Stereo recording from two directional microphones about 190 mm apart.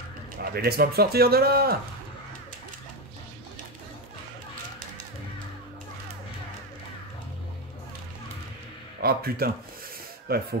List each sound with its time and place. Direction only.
0.4 s speech: 55° right (ahead or behind)
9.0 s speech: 55° right (ahead or behind)